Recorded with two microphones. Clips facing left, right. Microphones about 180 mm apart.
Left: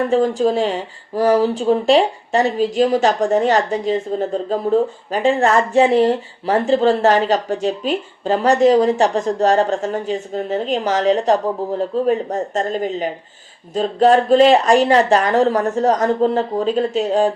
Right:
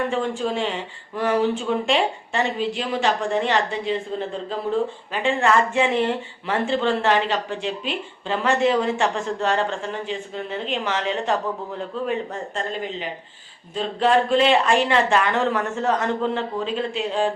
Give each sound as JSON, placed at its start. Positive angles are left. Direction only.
{"t": 0.1, "sound": "speech", "side_deg": 40}